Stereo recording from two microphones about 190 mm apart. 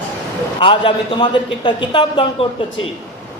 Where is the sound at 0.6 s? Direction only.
25° left (ahead or behind).